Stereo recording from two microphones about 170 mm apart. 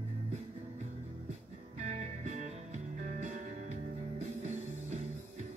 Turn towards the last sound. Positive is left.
turn(degrees=-40)  # may be behind; listen again after turning